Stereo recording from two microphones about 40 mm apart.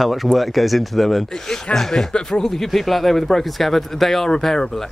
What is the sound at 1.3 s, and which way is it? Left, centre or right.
Speech, centre.